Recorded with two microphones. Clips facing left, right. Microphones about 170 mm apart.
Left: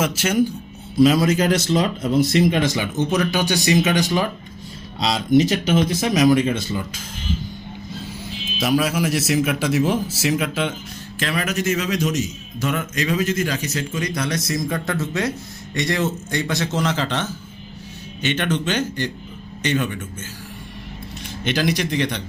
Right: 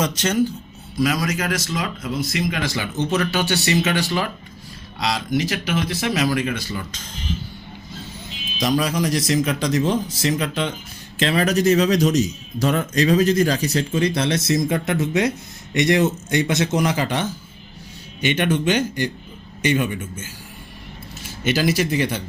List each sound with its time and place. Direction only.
0.0 s speech: 10° left (ahead or behind)
0.9 s speech: 25° left (ahead or behind)
8.5 s a man's voice: 5° left (ahead or behind)
11.2 s a man's voice: 30° right (ahead or behind); by 20.2 s 10° right (ahead or behind)
21.2 s speech: 5° right (ahead or behind)